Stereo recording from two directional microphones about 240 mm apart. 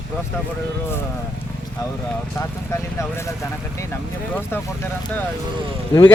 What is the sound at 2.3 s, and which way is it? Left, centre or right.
Speech, centre.